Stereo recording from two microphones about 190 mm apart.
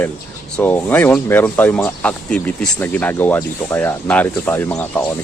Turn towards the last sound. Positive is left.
turn(degrees=5)  # may be behind; listen again after turning